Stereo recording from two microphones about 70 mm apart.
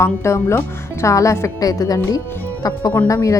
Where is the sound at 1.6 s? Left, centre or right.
Left.